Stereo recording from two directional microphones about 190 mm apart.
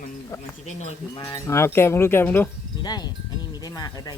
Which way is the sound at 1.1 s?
20° left (ahead or behind).